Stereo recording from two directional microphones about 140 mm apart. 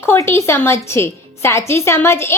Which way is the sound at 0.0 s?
15° left (ahead or behind).